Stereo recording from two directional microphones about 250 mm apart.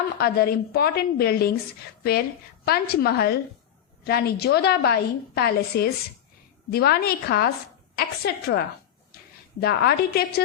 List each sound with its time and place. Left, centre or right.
0.2 s a woman's voice: left
2.6 s a woman's voice: left